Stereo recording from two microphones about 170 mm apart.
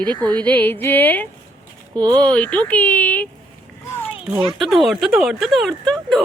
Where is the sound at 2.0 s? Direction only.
25° right (ahead or behind).